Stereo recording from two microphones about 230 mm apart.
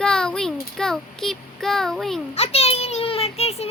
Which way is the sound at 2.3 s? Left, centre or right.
Left.